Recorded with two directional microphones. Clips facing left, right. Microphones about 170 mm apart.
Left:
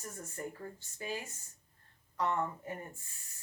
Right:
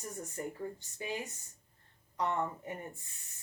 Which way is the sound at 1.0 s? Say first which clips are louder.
Right 1 dB; 20° right (ahead or behind).